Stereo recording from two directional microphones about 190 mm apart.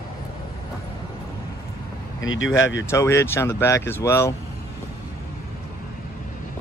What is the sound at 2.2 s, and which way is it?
Speech, 90° left.